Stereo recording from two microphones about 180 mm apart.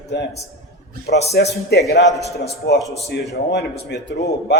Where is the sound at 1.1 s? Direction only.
65° left (ahead or behind).